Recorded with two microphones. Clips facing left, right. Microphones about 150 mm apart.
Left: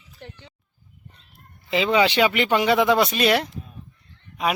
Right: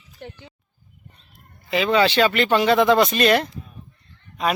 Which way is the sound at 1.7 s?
20° left (ahead or behind).